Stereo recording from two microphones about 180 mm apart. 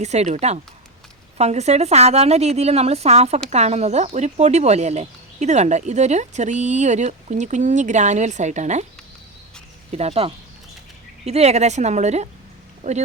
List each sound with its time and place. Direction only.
0.0 s speech: 40° right (ahead or behind)
9.9 s speech: 35° right (ahead or behind)